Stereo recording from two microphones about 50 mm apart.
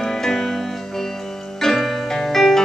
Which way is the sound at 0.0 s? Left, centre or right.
Centre.